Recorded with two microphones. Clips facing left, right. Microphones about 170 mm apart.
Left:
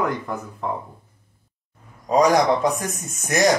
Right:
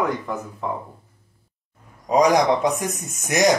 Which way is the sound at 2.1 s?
15° right (ahead or behind).